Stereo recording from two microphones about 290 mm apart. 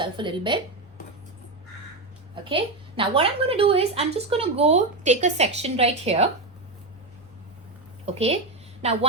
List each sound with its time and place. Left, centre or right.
0.0 s a woman's voice: centre
2.3 s a woman's voice: centre
8.0 s a woman's voice: right